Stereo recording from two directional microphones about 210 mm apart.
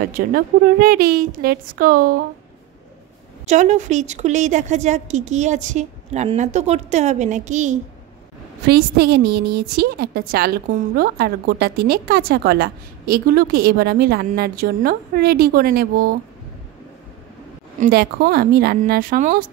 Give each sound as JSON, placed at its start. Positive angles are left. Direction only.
{"t": 0.0, "sound": "a woman's voice", "side_deg": -45}
{"t": 3.4, "sound": "a woman's voice", "side_deg": -35}
{"t": 8.6, "sound": "a woman's voice", "side_deg": -50}
{"t": 17.7, "sound": "a woman's voice", "side_deg": -45}